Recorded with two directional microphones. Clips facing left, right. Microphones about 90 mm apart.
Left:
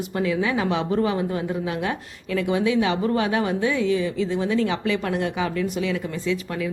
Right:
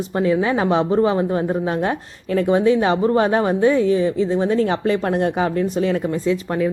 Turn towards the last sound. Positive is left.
turn(degrees=-40)  # may be behind; listen again after turning